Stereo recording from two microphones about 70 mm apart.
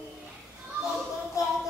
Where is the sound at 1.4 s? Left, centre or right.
Left.